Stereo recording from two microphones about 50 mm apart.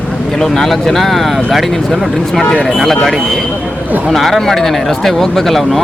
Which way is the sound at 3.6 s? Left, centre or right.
Right.